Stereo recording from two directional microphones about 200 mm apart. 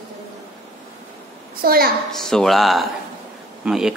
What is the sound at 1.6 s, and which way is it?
Speech, 50° right (ahead or behind).